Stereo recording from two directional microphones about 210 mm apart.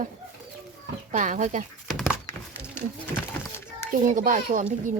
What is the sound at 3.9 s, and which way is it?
Speech, 40° right (ahead or behind).